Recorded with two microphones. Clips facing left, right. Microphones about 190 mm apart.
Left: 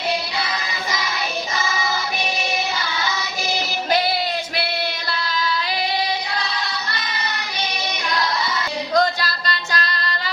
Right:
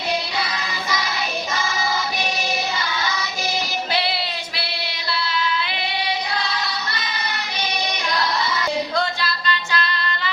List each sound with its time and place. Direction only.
9.0 s music: 40° left (ahead or behind)